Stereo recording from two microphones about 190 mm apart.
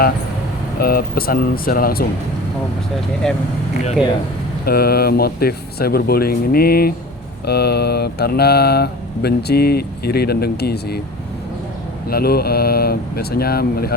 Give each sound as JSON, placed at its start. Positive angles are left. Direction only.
{"t": 0.8, "sound": "speech", "side_deg": 50}
{"t": 3.2, "sound": "speech", "side_deg": 0}
{"t": 4.6, "sound": "speech", "side_deg": 55}
{"t": 12.0, "sound": "speech", "side_deg": 55}